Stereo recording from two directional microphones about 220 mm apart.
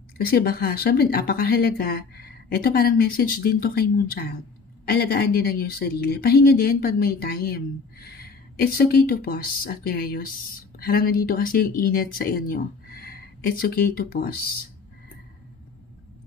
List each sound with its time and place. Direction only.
0.3 s a woman's voice: 45° left (ahead or behind)